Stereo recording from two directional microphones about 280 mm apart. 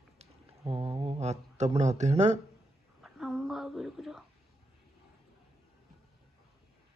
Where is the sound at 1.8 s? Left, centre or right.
Right.